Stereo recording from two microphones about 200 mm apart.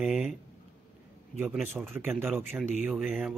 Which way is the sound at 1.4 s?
5° right (ahead or behind).